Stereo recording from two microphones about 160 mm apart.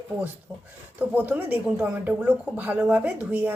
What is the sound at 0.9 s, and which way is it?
A woman's voice, 10° right (ahead or behind).